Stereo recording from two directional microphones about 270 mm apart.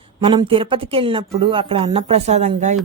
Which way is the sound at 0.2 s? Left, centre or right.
Centre.